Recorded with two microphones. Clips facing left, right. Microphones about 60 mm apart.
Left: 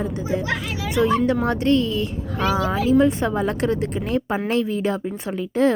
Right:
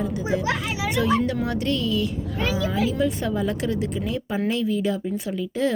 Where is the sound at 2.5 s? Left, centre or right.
Left.